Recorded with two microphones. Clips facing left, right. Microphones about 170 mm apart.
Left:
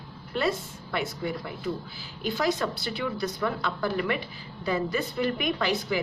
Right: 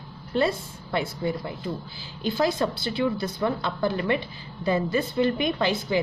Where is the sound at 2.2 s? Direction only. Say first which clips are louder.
Right 3 dB; 30° right (ahead or behind).